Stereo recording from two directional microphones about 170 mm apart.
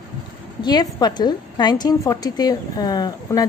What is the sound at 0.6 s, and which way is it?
A woman's voice, 25° left (ahead or behind).